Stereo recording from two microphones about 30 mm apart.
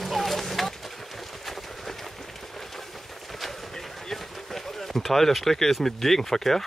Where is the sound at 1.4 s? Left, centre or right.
Centre.